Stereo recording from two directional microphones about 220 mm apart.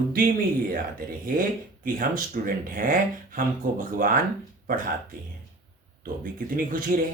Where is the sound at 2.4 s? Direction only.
40° right (ahead or behind).